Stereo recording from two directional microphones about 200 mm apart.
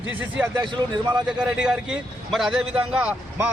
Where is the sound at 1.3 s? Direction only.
5° right (ahead or behind).